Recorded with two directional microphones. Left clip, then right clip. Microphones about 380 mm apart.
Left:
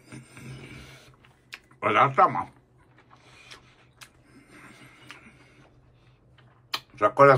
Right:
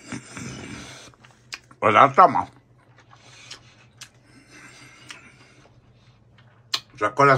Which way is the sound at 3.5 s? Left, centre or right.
Centre.